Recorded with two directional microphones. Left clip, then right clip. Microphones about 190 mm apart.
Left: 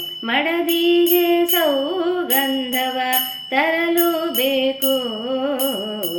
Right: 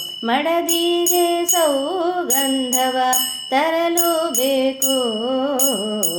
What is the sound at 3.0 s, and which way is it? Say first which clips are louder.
Music: right 2 dB; 35° right (ahead or behind).